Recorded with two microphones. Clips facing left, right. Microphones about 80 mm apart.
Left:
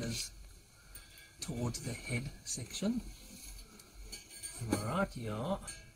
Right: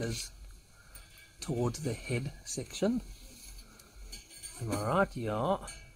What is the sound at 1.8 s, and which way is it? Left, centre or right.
Speech, right.